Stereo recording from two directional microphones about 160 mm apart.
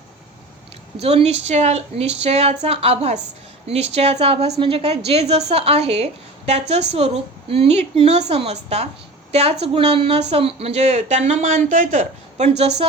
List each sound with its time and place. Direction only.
1.0 s a woman's voice: 40° right (ahead or behind)